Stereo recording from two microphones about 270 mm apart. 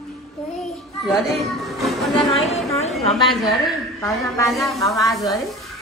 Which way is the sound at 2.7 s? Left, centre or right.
Left.